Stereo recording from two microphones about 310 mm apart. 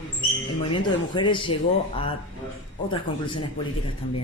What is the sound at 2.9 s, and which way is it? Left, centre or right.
Speech, centre.